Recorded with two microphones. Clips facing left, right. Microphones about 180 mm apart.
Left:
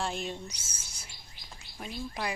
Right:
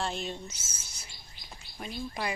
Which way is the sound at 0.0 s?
10° left (ahead or behind).